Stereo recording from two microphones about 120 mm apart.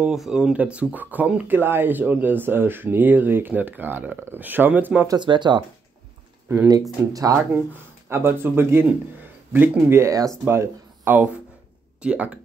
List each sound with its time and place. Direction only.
0.0 s speech: 5° right (ahead or behind)
5.0 s speech: 40° right (ahead or behind)
7.1 s speech: 30° right (ahead or behind)
8.1 s speech: 20° right (ahead or behind)